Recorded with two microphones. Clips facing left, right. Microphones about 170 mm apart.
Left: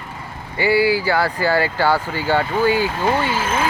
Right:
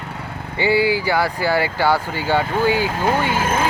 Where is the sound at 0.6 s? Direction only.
20° right (ahead or behind).